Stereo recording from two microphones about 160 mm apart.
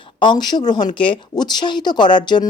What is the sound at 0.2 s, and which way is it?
Speech, 30° left (ahead or behind).